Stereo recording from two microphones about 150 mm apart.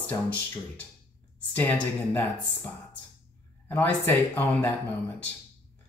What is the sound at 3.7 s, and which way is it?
Speech, 15° left (ahead or behind).